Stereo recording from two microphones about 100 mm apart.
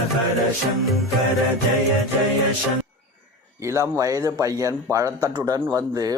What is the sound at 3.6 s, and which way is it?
A man's voice, 30° right (ahead or behind).